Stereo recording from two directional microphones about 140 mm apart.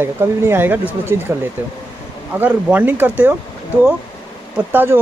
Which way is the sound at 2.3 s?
10° right (ahead or behind).